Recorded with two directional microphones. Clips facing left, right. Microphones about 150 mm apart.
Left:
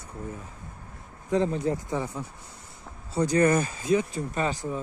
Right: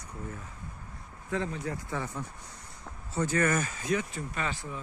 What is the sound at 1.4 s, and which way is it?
Speech, 30° left (ahead or behind).